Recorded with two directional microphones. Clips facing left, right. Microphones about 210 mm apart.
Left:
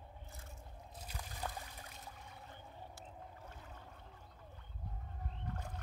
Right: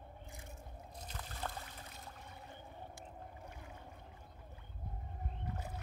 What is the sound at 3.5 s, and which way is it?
Boat, 10° right (ahead or behind).